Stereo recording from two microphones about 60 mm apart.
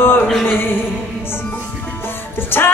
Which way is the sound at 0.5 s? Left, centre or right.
Left.